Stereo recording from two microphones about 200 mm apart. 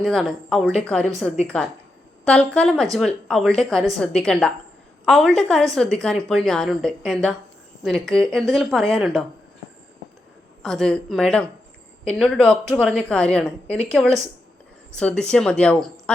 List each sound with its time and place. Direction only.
0.0 s a woman's voice: centre (ahead or behind)
10.6 s a woman's voice: centre (ahead or behind)